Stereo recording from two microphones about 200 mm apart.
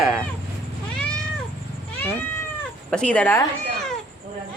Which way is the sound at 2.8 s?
5° left (ahead or behind).